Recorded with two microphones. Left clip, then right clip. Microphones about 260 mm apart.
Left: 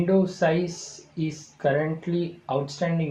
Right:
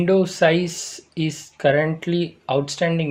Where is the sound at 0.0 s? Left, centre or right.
Right.